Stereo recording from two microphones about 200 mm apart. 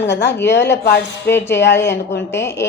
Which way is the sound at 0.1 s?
60° left (ahead or behind).